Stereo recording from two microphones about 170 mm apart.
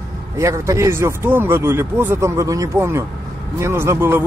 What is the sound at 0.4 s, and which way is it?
Speech, 15° right (ahead or behind).